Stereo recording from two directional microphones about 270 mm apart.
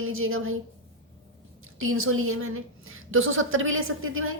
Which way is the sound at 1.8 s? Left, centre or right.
Right.